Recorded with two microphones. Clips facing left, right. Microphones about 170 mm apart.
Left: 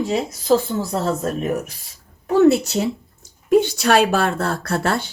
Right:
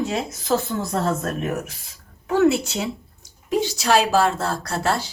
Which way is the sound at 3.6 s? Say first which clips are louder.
Left 3 dB; 60° left (ahead or behind).